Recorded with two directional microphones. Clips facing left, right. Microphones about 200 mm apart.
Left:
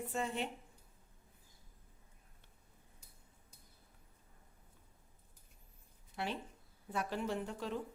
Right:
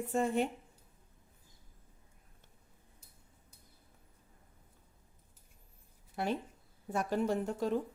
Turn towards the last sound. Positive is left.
turn(degrees=-45)  # may be behind; listen again after turning